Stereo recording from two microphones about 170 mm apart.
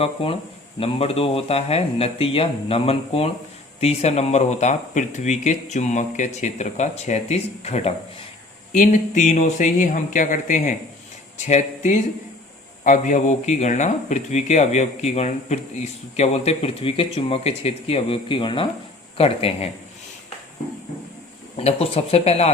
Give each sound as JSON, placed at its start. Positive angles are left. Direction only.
{"t": 0.0, "sound": "speech", "side_deg": 35}
{"t": 21.5, "sound": "speech", "side_deg": 40}